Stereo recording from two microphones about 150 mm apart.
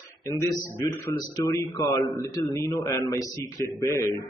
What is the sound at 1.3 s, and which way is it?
Speech, 20° left (ahead or behind).